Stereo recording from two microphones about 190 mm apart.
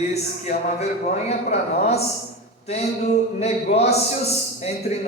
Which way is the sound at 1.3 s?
35° left (ahead or behind).